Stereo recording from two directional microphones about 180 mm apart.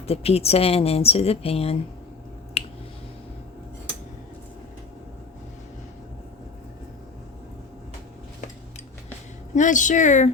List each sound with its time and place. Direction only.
0.0 s speech: 35° left (ahead or behind)
2.6 s finger snapping: 35° left (ahead or behind)
9.6 s speech: 45° left (ahead or behind)